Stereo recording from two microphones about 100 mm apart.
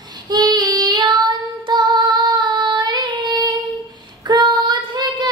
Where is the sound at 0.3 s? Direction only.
40° right (ahead or behind).